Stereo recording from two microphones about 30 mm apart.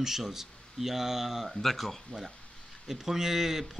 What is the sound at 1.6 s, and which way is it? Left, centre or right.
Speech, centre.